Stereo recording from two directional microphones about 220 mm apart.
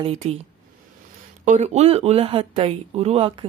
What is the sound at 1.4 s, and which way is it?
Speech, 35° right (ahead or behind).